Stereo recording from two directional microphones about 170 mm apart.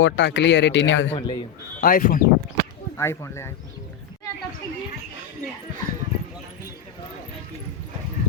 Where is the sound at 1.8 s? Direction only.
55° left (ahead or behind).